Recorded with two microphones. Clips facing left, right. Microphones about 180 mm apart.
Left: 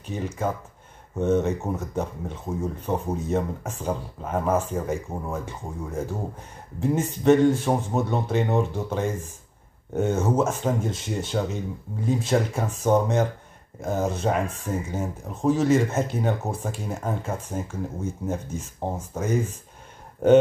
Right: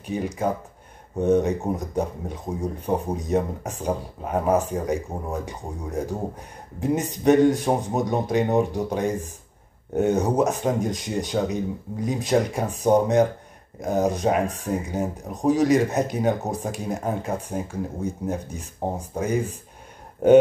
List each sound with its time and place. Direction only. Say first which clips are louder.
0.0 s speech: right 3 dB; 15° right (ahead or behind)
14.4 s speech: right 3 dB; 40° right (ahead or behind)
14.7 s speech: right 3 dB; 15° right (ahead or behind)
16.3 s speech: right 2 dB; 40° right (ahead or behind)
16.6 s speech: right 3 dB; 15° right (ahead or behind)